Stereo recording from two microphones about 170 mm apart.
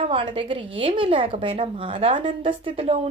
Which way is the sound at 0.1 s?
30° right (ahead or behind).